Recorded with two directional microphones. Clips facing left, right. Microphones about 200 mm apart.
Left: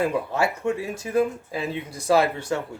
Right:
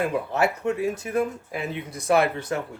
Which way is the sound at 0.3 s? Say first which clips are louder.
Right 1 dB; 25° left (ahead or behind).